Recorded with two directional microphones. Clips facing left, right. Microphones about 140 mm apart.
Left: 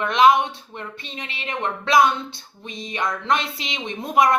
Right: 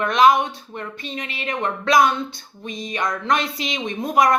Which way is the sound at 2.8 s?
30° left (ahead or behind).